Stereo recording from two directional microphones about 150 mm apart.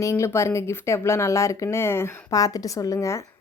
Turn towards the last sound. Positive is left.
turn(degrees=20)  # may be behind; listen again after turning